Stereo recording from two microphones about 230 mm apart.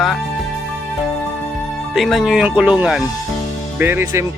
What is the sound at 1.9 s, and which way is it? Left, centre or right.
Speech, centre.